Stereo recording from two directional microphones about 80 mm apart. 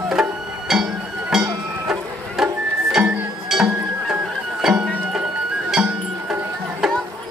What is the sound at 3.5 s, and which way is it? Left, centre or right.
Music, centre.